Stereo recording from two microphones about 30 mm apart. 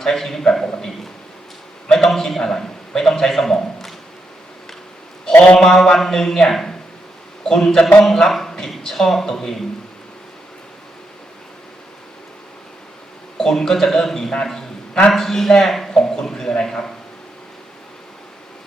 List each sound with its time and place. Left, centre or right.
0.0 s a man's voice: centre
5.5 s a man's voice: centre
13.5 s a man's voice: centre
14.4 s a sound: centre
15.3 s a man's voice: centre
15.9 s a man's voice: centre